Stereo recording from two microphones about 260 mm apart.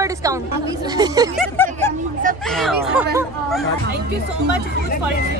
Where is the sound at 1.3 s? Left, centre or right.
Centre.